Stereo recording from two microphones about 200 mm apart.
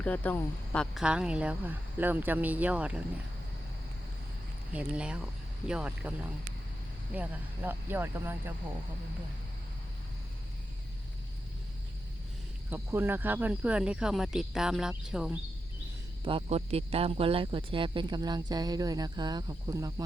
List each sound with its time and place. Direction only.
0.0 s speech: 10° left (ahead or behind)
4.7 s speech: 5° right (ahead or behind)
12.7 s speech: 10° right (ahead or behind)
16.2 s speech: 30° right (ahead or behind)